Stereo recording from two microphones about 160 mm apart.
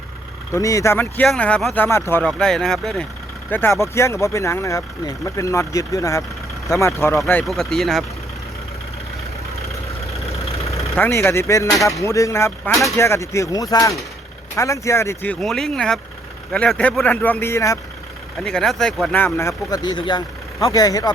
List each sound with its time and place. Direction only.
0.5 s speech: 20° left (ahead or behind); by 3.1 s centre (ahead or behind)
3.5 s speech: 15° left (ahead or behind)
7.4 s speech: centre (ahead or behind)
10.9 s speech: 15° left (ahead or behind)
18.3 s speech: centre (ahead or behind)
19.2 s speech: 15° left (ahead or behind)